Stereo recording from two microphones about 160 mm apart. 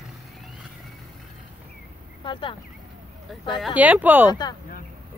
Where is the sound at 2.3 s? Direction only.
30° left (ahead or behind).